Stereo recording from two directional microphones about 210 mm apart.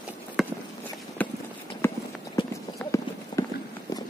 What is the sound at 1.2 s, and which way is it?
Clip-clop, 5° left (ahead or behind).